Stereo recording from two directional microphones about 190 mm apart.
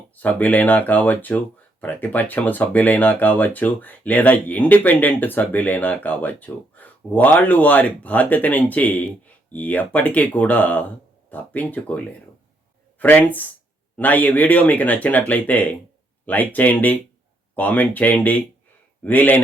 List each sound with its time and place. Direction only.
0.2 s speech: 10° left (ahead or behind)